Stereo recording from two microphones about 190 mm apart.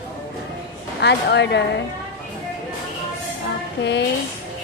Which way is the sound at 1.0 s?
65° left (ahead or behind).